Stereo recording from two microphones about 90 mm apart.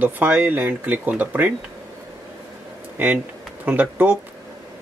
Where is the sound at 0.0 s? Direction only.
20° right (ahead or behind).